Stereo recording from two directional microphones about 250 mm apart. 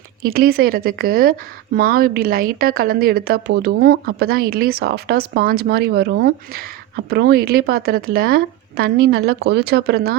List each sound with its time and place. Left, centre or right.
0.3 s a woman's voice: right